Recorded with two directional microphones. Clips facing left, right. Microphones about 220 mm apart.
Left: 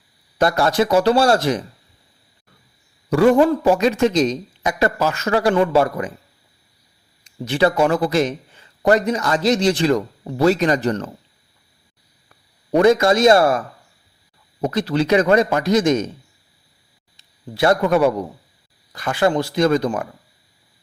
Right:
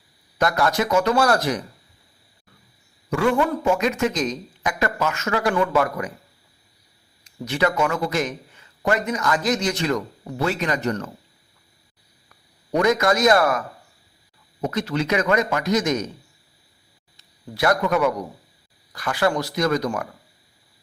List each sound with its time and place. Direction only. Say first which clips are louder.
0.3 s speech: left 4 dB; 30° left (ahead or behind)
3.1 s speech: left 7 dB; 35° left (ahead or behind)
7.3 s speech: left 4 dB; 30° left (ahead or behind)
12.7 s speech: left 5 dB; 30° left (ahead or behind)
14.6 s speech: left 5 dB; 35° left (ahead or behind)
17.5 s speech: left 4 dB; 30° left (ahead or behind)